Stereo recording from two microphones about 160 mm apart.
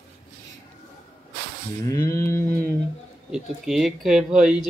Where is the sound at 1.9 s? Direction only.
20° left (ahead or behind).